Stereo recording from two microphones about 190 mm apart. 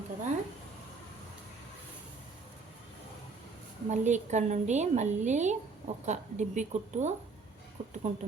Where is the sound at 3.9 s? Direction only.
40° right (ahead or behind).